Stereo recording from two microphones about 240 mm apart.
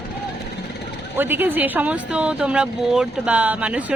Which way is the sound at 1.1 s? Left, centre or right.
Centre.